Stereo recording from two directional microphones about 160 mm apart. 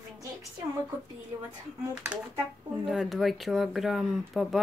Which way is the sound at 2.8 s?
Centre (ahead or behind).